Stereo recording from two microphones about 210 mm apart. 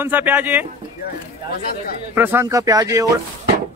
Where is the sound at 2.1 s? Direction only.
10° right (ahead or behind).